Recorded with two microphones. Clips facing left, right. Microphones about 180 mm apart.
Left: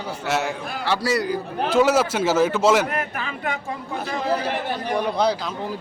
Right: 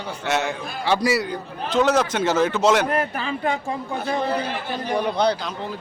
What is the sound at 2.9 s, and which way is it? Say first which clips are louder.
Speech: right 4 dB; 30° right (ahead or behind).